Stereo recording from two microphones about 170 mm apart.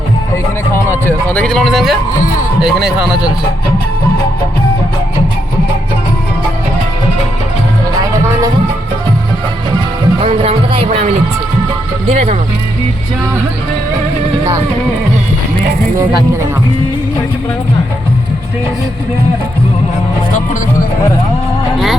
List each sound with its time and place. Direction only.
0.7 s speech: 10° left (ahead or behind)
10.2 s speech: 35° right (ahead or behind)
12.0 s speech: 35° right (ahead or behind)